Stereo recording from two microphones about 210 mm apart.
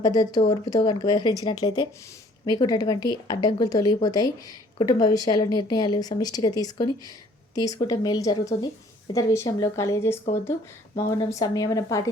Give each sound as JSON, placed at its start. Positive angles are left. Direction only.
{"t": 0.0, "sound": "speech", "side_deg": 20}